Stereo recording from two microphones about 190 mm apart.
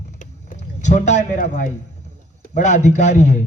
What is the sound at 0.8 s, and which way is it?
A man's voice, 40° left (ahead or behind).